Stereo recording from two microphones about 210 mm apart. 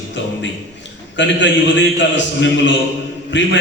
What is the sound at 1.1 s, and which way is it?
A man's voice, 60° left (ahead or behind).